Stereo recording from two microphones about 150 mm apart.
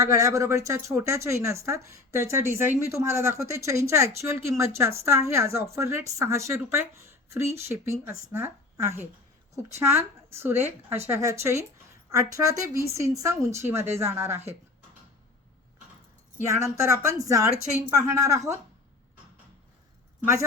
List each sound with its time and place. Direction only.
0.0 s speech: 20° right (ahead or behind)
16.8 s speech: 20° right (ahead or behind)